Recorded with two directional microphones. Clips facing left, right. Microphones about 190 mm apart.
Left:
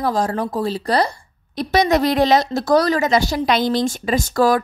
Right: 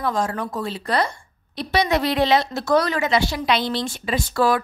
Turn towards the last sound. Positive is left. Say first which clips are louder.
# left 4 dB
turn(degrees=40)  # may be behind; listen again after turning